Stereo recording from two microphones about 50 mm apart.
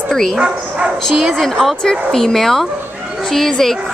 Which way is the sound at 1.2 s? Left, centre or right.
Centre.